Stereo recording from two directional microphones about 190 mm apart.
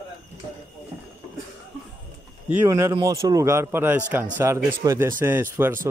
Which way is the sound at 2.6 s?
15° right (ahead or behind).